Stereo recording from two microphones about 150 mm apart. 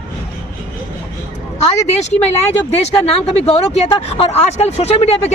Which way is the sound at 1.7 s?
45° left (ahead or behind).